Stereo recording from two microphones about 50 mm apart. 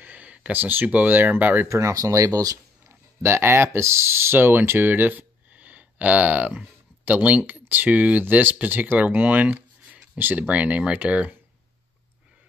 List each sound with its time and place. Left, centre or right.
0.0 s a sound: right
0.8 s speech: right
1.7 s speech: right
2.9 s speech: right